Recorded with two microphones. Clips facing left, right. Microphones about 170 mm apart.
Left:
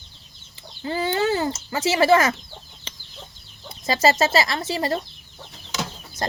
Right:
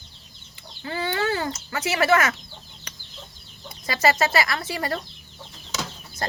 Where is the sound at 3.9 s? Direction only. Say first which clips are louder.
Left 3 dB; 25° left (ahead or behind).